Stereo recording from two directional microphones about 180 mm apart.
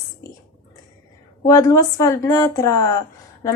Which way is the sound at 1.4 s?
15° left (ahead or behind).